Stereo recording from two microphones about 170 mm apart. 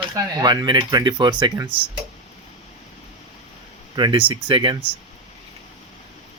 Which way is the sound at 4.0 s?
30° right (ahead or behind).